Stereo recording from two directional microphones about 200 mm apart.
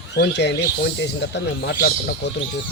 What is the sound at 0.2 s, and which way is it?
Speech, 55° left (ahead or behind).